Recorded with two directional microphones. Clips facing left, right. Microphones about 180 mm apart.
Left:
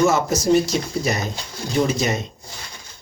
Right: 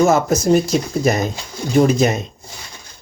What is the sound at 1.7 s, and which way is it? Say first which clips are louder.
Speech: right 7 dB; 55° right (ahead or behind).